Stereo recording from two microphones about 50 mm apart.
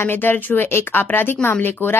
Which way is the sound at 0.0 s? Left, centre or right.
Left.